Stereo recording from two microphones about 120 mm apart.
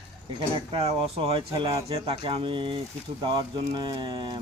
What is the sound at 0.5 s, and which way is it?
Speech, 50° right (ahead or behind).